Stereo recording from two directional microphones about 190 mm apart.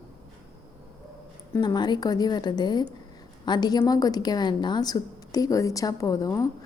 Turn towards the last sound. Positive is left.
turn(degrees=20)  # may be behind; listen again after turning